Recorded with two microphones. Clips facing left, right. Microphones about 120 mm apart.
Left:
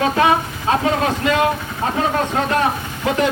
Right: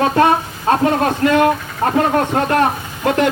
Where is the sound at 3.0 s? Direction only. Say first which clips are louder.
Right 3 dB; 60° right (ahead or behind).